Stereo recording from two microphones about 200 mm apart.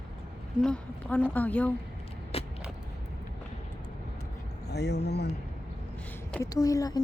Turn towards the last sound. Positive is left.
turn(degrees=20)  # may be behind; listen again after turning